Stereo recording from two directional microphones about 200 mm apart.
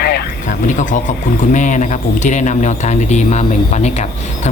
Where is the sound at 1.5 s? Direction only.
40° left (ahead or behind).